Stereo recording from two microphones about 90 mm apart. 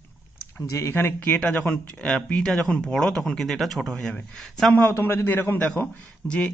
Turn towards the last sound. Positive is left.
turn(degrees=10)  # may be behind; listen again after turning